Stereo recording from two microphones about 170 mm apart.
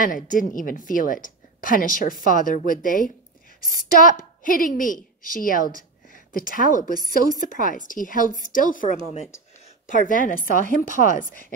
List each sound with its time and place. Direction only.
0.0 s a woman's voice: 55° left (ahead or behind)
9.8 s a woman's voice: 50° left (ahead or behind)